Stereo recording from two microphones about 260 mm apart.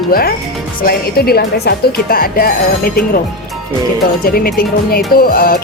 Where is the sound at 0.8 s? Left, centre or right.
Left.